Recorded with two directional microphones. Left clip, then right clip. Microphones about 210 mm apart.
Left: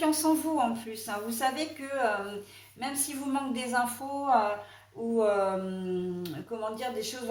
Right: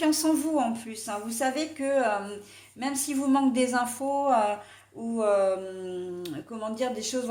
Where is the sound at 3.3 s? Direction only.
45° right (ahead or behind).